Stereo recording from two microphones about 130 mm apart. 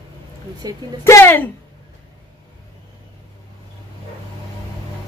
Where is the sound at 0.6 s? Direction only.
30° right (ahead or behind).